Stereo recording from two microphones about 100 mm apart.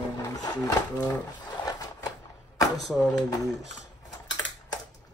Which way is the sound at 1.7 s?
40° left (ahead or behind).